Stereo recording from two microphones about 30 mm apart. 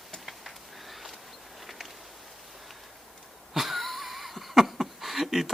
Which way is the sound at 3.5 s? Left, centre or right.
Centre.